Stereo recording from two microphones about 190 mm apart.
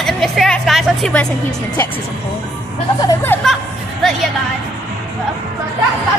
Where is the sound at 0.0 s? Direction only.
Centre (ahead or behind).